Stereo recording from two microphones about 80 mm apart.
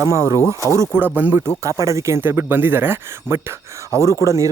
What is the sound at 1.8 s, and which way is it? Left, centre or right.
Speech, right.